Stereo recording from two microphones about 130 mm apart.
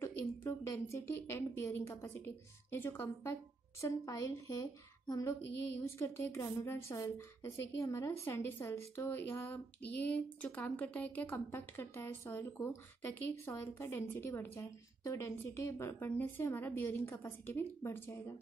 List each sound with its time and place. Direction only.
0.0 s a woman's voice: 20° left (ahead or behind)